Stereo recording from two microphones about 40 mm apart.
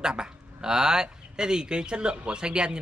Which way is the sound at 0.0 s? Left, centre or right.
Centre.